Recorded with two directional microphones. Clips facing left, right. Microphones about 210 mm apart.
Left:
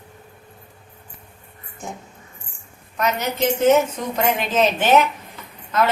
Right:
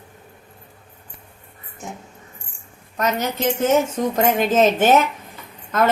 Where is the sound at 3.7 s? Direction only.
45° right (ahead or behind).